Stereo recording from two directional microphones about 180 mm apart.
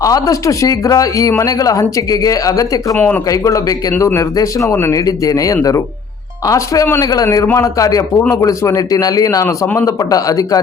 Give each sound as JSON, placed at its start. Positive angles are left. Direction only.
{"t": 0.0, "sound": "a man's voice", "side_deg": 20}
{"t": 2.9, "sound": "a man's voice", "side_deg": 10}